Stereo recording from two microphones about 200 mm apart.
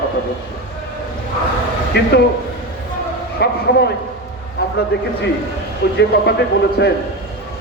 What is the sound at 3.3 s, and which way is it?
Speech, 55° left (ahead or behind).